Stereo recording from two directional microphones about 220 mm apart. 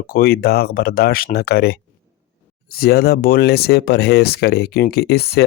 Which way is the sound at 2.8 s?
45° left (ahead or behind).